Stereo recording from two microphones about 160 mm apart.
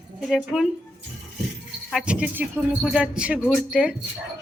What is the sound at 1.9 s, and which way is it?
Speech, 5° right (ahead or behind).